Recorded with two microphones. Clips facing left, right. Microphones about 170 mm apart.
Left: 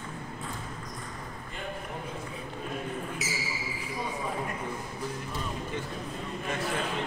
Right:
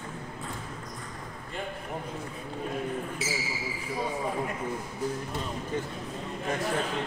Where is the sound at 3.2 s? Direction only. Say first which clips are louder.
Right 3 dB; 30° right (ahead or behind).